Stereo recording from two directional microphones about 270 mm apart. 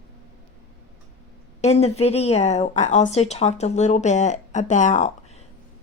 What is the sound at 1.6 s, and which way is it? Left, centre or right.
A woman's voice, left.